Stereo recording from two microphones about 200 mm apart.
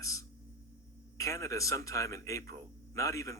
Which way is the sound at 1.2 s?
15° left (ahead or behind).